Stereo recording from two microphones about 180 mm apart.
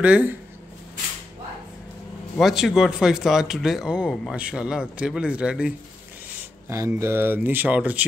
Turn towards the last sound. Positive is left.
turn(degrees=-10)  # may be behind; listen again after turning